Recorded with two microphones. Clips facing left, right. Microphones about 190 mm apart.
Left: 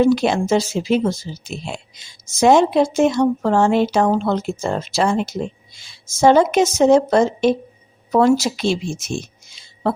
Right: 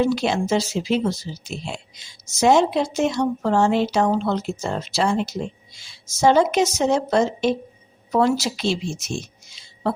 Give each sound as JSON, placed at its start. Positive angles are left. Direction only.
{"t": 0.0, "sound": "speech", "side_deg": 50}